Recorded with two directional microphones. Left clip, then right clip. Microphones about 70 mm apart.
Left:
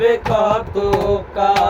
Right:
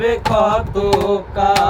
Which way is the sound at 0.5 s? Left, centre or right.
Centre.